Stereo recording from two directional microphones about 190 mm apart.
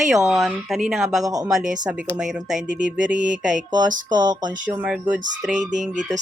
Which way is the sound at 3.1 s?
40° right (ahead or behind).